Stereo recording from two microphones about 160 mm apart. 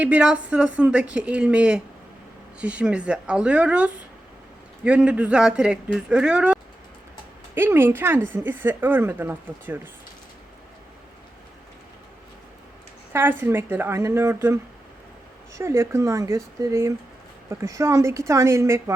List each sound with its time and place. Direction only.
0.0 s a woman's voice: 5° right (ahead or behind)
13.1 s a woman's voice: 15° right (ahead or behind)